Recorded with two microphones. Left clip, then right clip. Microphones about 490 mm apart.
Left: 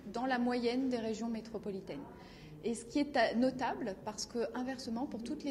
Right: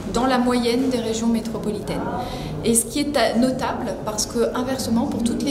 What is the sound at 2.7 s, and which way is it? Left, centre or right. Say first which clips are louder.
A woman's voice: right 14 dB; left.